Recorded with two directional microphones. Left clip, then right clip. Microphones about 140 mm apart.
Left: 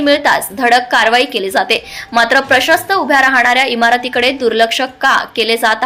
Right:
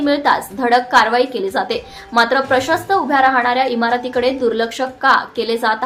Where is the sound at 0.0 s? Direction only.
15° left (ahead or behind).